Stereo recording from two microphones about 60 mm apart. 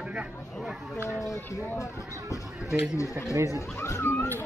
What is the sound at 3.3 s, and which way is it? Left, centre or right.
Speech, right.